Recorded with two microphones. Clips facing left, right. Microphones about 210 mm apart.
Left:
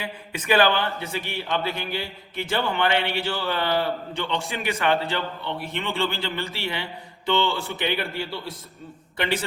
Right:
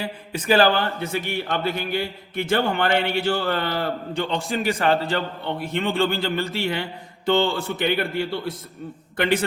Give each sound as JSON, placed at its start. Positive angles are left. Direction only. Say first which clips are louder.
{"t": 0.0, "sound": "a man's voice", "louder": "right 4 dB", "side_deg": -35}